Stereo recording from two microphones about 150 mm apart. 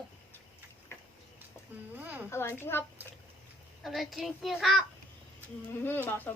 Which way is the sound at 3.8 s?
Centre (ahead or behind).